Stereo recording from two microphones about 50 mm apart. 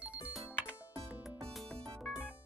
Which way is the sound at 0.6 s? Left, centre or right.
Right.